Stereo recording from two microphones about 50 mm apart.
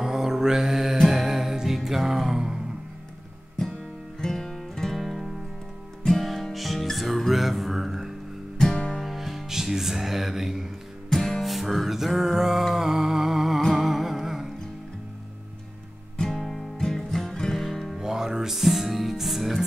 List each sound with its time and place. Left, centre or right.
0.0 s mantra: centre
0.9 s music: centre
4.2 s music: centre
8.7 s music: centre
9.0 s music: centre
11.1 s music: centre
16.2 s music: centre
17.9 s music: centre